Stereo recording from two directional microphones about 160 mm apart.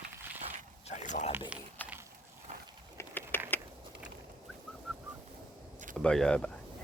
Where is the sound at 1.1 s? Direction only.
50° left (ahead or behind).